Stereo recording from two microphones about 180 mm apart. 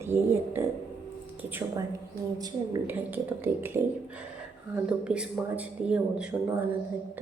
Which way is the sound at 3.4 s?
10° right (ahead or behind).